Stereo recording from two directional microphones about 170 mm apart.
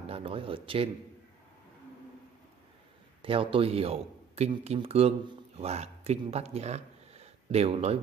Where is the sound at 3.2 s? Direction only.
30° right (ahead or behind).